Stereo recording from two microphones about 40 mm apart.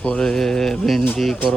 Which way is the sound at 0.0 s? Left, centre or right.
Left.